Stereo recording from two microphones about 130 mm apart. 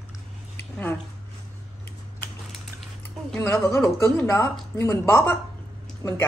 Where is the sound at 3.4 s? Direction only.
20° left (ahead or behind).